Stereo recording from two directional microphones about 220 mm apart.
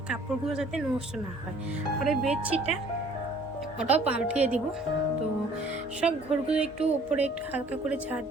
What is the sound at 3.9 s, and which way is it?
Speech, 5° right (ahead or behind).